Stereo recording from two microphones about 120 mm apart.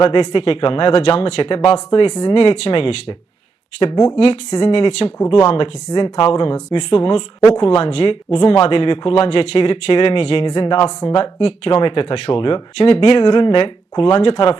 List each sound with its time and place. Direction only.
0.0 s speech: 50° left (ahead or behind)
5.9 s speech: 40° left (ahead or behind)
13.1 s speech: 45° left (ahead or behind)